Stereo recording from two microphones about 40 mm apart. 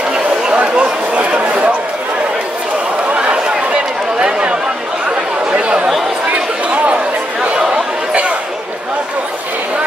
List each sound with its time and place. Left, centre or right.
0.5 s chatter: right
4.2 s chatter: right
7.5 s chatter: centre